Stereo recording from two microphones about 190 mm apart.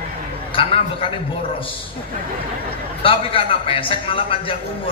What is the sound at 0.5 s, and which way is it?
Speech, 30° left (ahead or behind).